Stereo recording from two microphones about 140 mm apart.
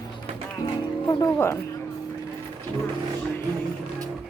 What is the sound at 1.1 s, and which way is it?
Music, 20° left (ahead or behind).